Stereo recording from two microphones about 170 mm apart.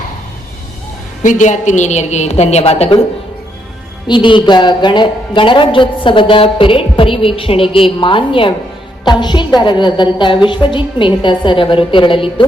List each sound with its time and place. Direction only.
1.2 s a woman's voice: 45° left (ahead or behind)
4.0 s a woman's voice: 30° left (ahead or behind)